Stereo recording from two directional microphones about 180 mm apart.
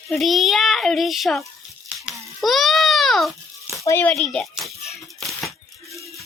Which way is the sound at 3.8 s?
10° left (ahead or behind).